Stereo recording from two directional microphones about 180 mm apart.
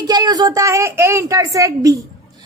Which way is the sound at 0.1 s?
20° right (ahead or behind).